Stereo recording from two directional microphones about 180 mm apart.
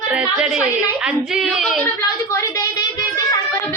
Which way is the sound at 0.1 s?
5° right (ahead or behind).